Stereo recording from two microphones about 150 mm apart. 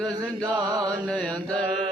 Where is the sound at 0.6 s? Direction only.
25° right (ahead or behind).